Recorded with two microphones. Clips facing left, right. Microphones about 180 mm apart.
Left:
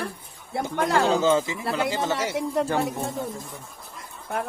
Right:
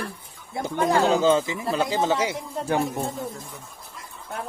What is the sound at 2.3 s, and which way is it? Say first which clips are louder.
Speech: left 7 dB; 75° left (ahead or behind).